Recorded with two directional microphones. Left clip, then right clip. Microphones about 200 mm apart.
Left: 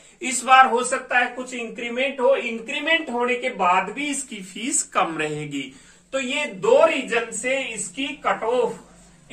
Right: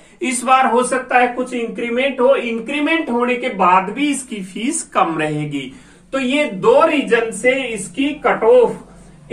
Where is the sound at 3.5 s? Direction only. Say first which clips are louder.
Right 8 dB; 10° left (ahead or behind).